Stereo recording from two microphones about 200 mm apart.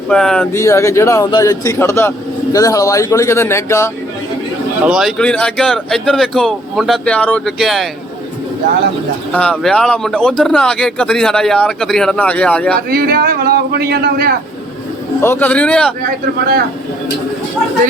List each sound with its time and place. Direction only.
0.1 s speech: 5° left (ahead or behind)
0.5 s speech: 15° left (ahead or behind)
4.9 s speech: centre (ahead or behind)
9.3 s speech: 5° left (ahead or behind)
12.9 s a man's voice: 50° right (ahead or behind)
15.2 s speech: 10° left (ahead or behind)